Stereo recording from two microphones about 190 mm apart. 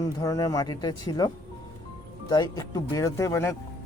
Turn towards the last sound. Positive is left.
turn(degrees=15)  # may be behind; listen again after turning